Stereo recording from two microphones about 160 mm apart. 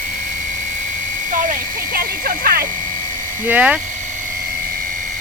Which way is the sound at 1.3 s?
55° right (ahead or behind).